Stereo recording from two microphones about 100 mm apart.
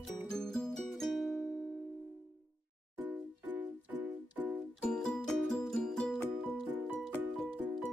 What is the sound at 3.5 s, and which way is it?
Music, 20° right (ahead or behind).